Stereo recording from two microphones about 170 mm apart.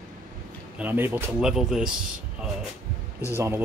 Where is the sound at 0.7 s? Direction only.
10° right (ahead or behind).